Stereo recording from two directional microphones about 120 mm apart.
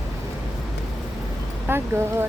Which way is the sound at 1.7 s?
20° right (ahead or behind).